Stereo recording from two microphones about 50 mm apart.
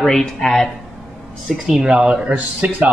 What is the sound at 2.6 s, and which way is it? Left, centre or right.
Speech, right.